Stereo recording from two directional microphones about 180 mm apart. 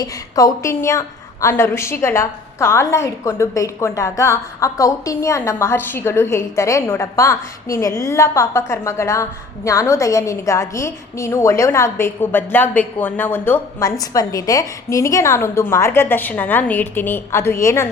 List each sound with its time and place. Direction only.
0.0 s a woman's voice: 20° left (ahead or behind)